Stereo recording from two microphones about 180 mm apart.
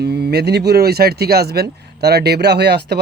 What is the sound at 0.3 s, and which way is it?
Speech, 65° right (ahead or behind).